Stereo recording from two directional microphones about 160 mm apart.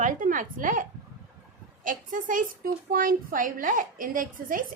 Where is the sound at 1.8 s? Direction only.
55° right (ahead or behind).